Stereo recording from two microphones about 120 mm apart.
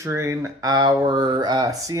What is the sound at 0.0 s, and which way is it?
Speech, 25° right (ahead or behind).